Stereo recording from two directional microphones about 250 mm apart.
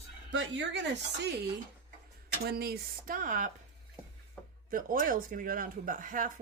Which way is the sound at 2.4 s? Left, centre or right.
Right.